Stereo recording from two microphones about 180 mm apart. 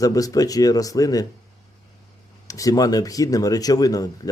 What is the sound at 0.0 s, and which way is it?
Speech, 20° left (ahead or behind).